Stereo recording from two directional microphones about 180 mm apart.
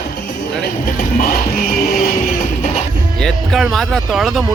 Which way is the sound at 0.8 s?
55° left (ahead or behind).